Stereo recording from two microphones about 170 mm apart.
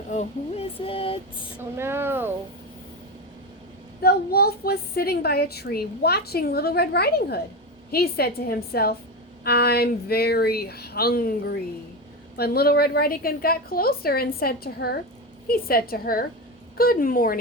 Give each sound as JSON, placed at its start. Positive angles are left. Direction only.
{"t": 0.1, "sound": "speech", "side_deg": 40}
{"t": 1.5, "sound": "speech", "side_deg": -15}
{"t": 4.0, "sound": "a woman's voice", "side_deg": 65}